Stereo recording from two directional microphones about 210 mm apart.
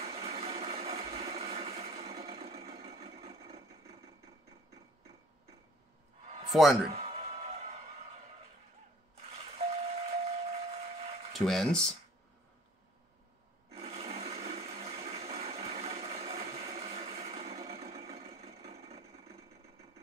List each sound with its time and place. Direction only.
0.0 s a sound: 30° right (ahead or behind)
6.5 s speech: centre (ahead or behind)
6.9 s music: 30° right (ahead or behind)
9.1 s a sound: 30° right (ahead or behind)
11.3 s speech: centre (ahead or behind)
13.7 s toilet flush: 30° right (ahead or behind)